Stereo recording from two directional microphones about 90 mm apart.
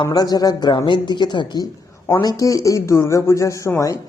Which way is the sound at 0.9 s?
60° left (ahead or behind).